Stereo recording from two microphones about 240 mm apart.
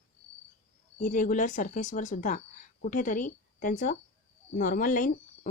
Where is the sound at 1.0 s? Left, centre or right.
Left.